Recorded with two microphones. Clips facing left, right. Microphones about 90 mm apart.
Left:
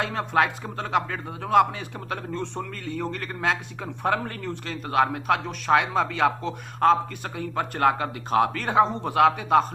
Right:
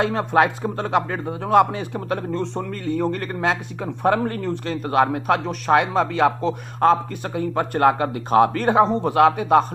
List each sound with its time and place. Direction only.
0.0 s a man's voice: 20° right (ahead or behind)